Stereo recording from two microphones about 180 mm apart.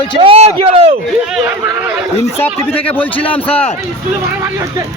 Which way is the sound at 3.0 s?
10° left (ahead or behind).